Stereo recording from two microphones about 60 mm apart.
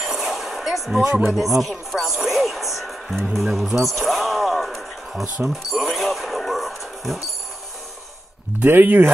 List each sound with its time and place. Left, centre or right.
0.0 s a sound: centre
1.2 s speech: centre
3.4 s speech: centre
3.7 s basketball bounce: centre
5.5 s music: centre
8.6 s speech: right